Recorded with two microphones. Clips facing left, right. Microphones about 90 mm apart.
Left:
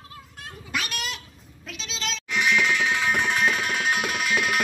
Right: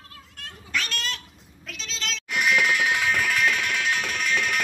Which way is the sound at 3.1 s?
30° left (ahead or behind).